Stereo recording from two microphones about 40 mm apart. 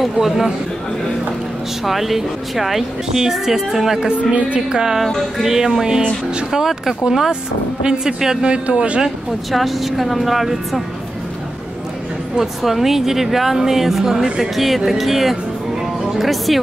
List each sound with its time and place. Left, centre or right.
0.0 s speech: centre
1.9 s speech: centre
4.3 s a woman's voice: right
4.6 s speech: centre
9.5 s a woman's voice: centre
12.4 s a woman's voice: centre